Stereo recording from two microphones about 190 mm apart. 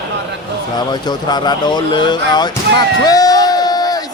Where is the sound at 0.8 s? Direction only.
20° left (ahead or behind).